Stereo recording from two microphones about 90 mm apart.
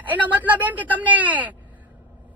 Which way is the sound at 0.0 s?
15° right (ahead or behind).